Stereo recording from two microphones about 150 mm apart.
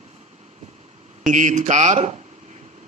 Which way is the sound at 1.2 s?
55° right (ahead or behind).